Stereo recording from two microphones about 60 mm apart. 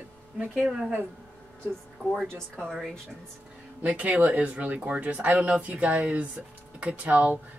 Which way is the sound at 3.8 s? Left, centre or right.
Right.